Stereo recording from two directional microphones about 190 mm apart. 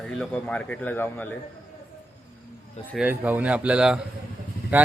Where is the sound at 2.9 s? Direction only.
5° right (ahead or behind).